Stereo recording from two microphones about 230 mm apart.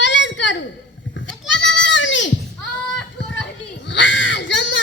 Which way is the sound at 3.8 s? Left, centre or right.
Left.